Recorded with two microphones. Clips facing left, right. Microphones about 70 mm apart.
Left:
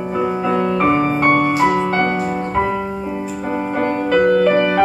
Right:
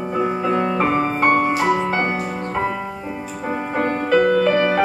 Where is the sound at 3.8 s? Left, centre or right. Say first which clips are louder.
Left 1 dB; centre.